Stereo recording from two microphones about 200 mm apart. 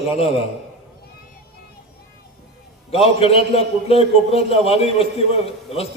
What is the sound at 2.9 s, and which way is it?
A man's voice, 30° left (ahead or behind).